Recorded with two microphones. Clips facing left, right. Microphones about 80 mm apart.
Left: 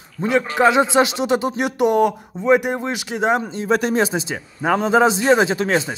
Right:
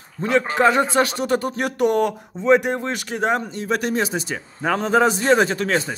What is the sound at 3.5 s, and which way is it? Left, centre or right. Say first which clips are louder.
Speech: left 4 dB; left.